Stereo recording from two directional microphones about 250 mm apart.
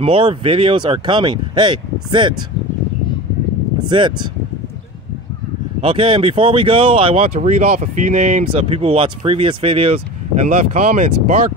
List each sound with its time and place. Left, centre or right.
0.0 s speech: right
3.9 s speech: centre
5.8 s speech: right